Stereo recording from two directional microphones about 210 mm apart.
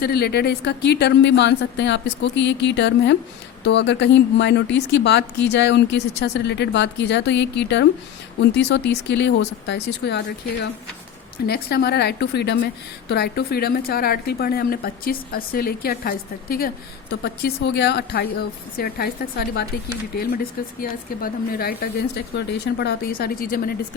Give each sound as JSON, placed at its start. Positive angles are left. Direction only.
{"t": 0.0, "sound": "a woman's voice", "side_deg": 50}